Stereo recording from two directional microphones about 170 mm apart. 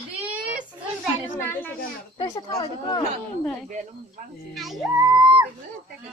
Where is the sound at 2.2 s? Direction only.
25° left (ahead or behind).